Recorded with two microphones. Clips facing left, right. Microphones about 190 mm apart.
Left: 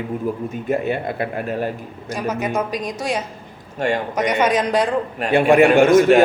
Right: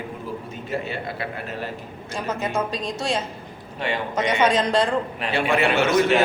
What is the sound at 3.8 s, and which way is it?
Speech, 45° left (ahead or behind).